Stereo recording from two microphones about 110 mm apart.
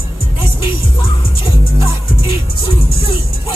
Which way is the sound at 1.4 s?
55° left (ahead or behind).